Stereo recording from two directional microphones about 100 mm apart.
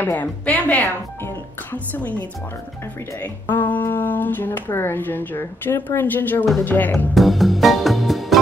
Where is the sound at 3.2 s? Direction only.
20° left (ahead or behind).